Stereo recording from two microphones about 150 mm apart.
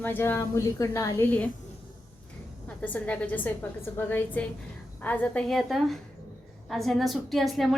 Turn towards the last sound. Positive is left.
turn(degrees=0)  # may be behind; listen again after turning